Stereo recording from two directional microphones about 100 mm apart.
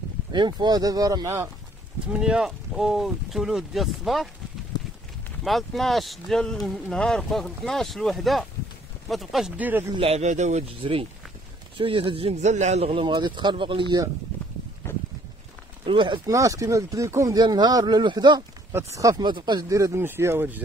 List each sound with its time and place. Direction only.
0.3 s speech: 50° right (ahead or behind); by 1.5 s 30° right (ahead or behind)
2.0 s speech: 10° right (ahead or behind)
5.4 s speech: centre (ahead or behind)
9.6 s speech: 20° right (ahead or behind)
9.9 s speech: 85° right
11.7 s speech: 60° right (ahead or behind)
14.8 s a sound: 20° left (ahead or behind)
15.8 s speech: 55° right (ahead or behind)
16.3 s speech: 35° right (ahead or behind)
17.4 s speech: 45° right (ahead or behind)
18.9 s speech: 35° right (ahead or behind)
19.2 s speech: 50° right (ahead or behind)
19.7 s speech: 30° right (ahead or behind)